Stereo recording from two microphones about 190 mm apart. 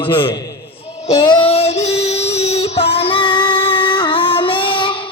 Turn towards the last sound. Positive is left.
turn(degrees=25)  # may be behind; listen again after turning